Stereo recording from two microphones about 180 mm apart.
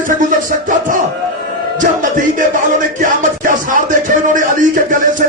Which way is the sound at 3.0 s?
50° right (ahead or behind).